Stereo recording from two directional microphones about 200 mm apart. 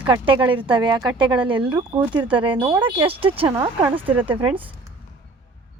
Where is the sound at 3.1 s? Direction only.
25° right (ahead or behind).